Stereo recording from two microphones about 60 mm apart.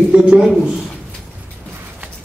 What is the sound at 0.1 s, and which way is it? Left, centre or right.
Speech, centre.